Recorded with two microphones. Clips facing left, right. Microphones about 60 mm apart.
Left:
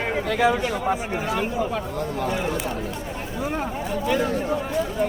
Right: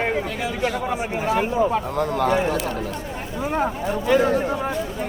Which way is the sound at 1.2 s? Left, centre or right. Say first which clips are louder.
Right 5 dB; right.